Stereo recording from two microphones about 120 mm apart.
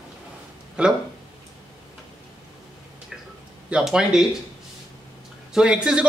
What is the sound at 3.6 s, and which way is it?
Speech, 5° right (ahead or behind).